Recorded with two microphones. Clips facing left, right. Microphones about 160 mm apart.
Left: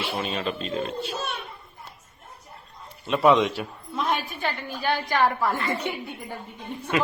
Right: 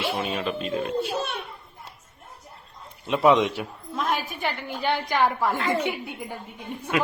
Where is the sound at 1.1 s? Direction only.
60° right (ahead or behind).